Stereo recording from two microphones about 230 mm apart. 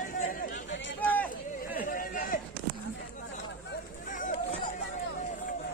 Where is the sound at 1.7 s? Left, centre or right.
Left.